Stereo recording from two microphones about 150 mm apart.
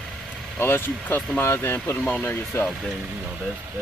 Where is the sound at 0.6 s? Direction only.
15° left (ahead or behind).